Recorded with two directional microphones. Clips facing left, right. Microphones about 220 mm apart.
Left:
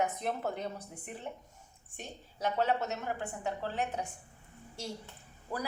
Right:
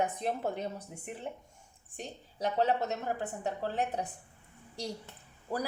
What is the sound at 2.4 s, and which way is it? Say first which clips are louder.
A woman's voice: right 2 dB; 35° right (ahead or behind).